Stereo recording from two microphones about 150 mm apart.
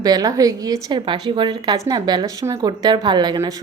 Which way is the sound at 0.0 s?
25° right (ahead or behind).